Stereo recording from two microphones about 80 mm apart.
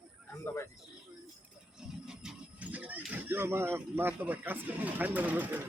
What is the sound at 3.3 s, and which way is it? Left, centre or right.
Speech, right.